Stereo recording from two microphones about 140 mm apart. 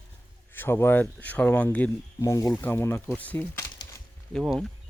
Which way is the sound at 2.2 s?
25° left (ahead or behind).